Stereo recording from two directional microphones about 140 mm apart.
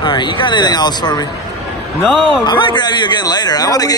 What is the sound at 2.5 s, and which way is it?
Speech, 35° left (ahead or behind).